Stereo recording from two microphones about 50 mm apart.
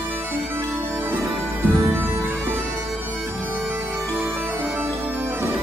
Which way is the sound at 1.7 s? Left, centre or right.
Right.